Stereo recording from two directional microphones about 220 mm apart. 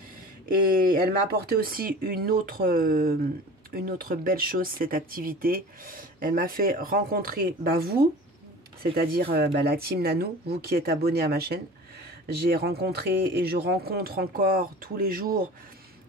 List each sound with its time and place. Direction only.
0.9 s speech: 45° right (ahead or behind)